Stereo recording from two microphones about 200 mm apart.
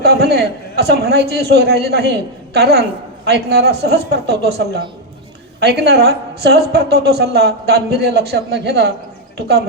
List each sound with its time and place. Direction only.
0.0 s a man's voice: 55° right (ahead or behind)